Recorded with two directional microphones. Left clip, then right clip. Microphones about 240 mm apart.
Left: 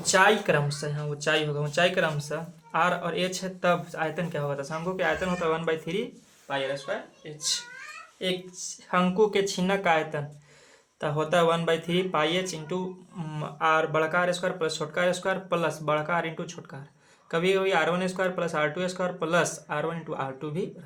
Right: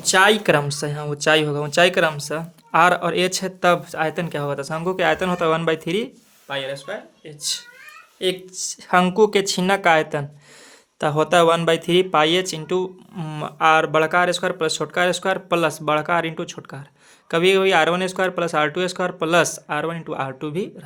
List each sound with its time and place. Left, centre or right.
0.0 s speech: right
8.2 s speech: right